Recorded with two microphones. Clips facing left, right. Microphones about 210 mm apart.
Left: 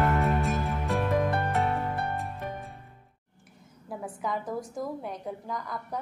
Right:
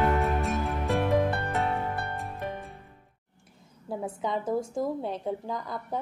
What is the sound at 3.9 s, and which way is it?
A woman's voice, 25° right (ahead or behind).